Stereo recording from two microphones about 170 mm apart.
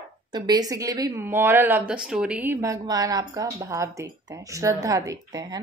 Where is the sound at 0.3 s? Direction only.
25° right (ahead or behind).